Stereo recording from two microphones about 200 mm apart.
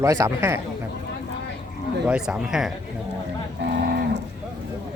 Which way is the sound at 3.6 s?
60° right (ahead or behind).